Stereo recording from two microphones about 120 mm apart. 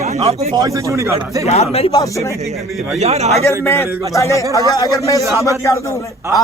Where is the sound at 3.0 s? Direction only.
65° right (ahead or behind).